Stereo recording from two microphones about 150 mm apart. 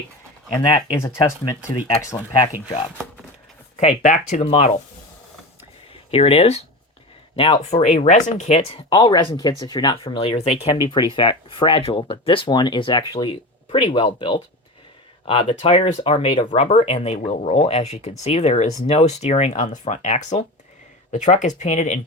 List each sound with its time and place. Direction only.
0.7 s speech: 20° left (ahead or behind)
3.8 s speech: 55° left (ahead or behind)
5.9 s speech: 40° left (ahead or behind)
7.8 s speech: 50° left (ahead or behind); by 16.5 s 35° left (ahead or behind)
16.6 s speech: 45° left (ahead or behind)